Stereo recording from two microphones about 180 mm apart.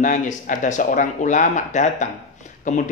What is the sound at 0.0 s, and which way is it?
Speech, 45° left (ahead or behind).